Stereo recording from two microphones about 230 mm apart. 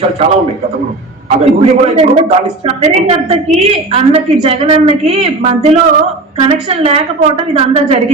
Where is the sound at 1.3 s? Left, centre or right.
Right.